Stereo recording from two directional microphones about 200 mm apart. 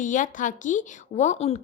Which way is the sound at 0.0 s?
40° left (ahead or behind).